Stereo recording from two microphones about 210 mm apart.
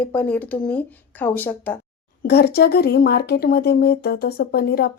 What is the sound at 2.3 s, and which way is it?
Speech, 50° left (ahead or behind).